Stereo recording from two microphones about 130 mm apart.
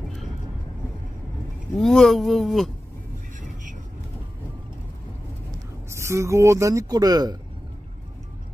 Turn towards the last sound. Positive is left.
turn(degrees=-30)  # may be behind; listen again after turning